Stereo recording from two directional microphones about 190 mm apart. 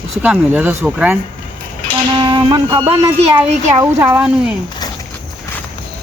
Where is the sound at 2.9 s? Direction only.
15° right (ahead or behind).